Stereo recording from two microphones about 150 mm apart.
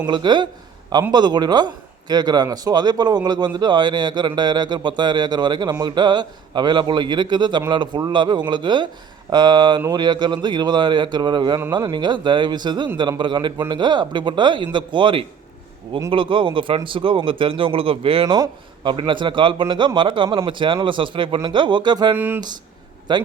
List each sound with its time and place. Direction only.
0.1 s a man's voice: 30° right (ahead or behind)
22.1 s speech: 15° right (ahead or behind)
23.1 s speech: 30° right (ahead or behind)